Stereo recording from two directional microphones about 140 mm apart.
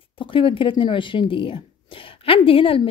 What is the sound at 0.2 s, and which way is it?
A woman's voice, 40° left (ahead or behind).